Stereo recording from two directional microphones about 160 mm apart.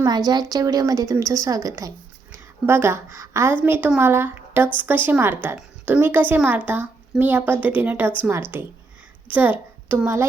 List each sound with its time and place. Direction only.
0.0 s a woman's voice: 25° right (ahead or behind)